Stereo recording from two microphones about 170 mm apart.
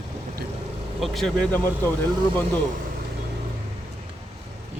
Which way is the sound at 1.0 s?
Centre (ahead or behind).